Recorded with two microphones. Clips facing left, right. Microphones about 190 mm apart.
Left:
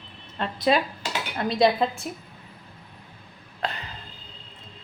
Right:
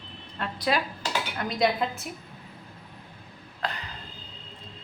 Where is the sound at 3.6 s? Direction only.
25° left (ahead or behind).